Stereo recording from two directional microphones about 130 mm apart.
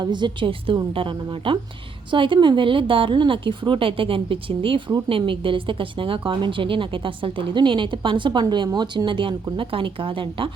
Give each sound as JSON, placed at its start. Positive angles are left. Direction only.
{"t": 0.0, "sound": "speech", "side_deg": -35}